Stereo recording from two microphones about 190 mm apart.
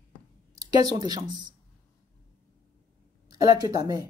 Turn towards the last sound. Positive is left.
turn(degrees=-20)  # may be behind; listen again after turning